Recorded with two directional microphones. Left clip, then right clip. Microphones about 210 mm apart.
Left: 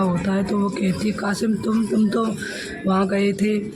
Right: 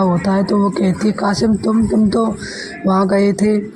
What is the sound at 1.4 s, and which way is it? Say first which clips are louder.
Speech: right 7 dB; 15° right (ahead or behind).